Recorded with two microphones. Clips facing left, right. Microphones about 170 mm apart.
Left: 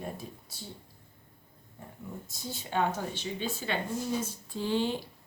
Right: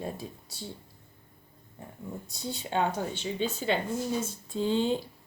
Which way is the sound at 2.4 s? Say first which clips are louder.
Right 2 dB; 25° right (ahead or behind).